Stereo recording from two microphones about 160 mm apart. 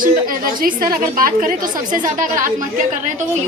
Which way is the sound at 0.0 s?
60° right (ahead or behind).